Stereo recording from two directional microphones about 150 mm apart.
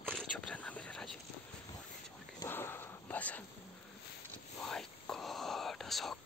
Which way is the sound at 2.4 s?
15° left (ahead or behind).